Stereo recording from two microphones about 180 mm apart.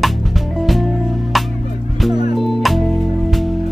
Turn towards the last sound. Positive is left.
turn(degrees=0)  # may be behind; listen again after turning